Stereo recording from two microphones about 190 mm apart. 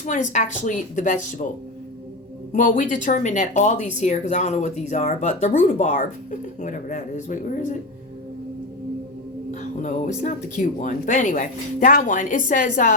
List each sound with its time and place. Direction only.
0.0 s speech: 40° left (ahead or behind)
2.5 s speech: 40° left (ahead or behind)
9.8 s speech: 40° left (ahead or behind)